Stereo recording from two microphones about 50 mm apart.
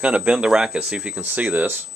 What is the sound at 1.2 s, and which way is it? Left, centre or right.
Speech, right.